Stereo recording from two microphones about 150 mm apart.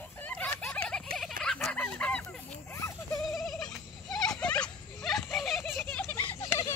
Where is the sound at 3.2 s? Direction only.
Centre (ahead or behind); by 6.7 s 20° left (ahead or behind).